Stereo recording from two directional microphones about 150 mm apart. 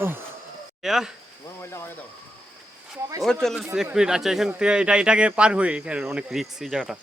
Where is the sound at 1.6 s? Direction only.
15° left (ahead or behind).